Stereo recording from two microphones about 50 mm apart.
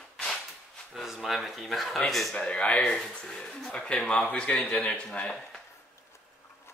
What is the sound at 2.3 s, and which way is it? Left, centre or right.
Speech, left.